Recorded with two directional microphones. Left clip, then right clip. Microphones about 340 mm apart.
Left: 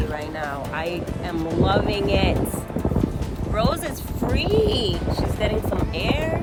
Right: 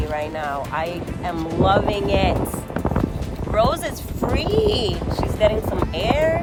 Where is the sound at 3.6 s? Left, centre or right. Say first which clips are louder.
Right 5 dB; right.